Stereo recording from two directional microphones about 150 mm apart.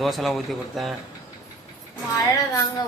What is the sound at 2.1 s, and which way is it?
Speech, 25° left (ahead or behind).